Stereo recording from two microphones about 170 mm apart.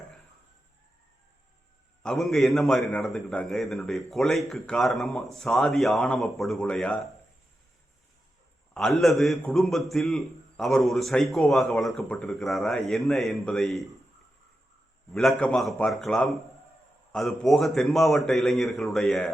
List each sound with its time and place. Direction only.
2.0 s a man's voice: centre (ahead or behind)
8.7 s a man's voice: centre (ahead or behind)
15.1 s a man's voice: centre (ahead or behind)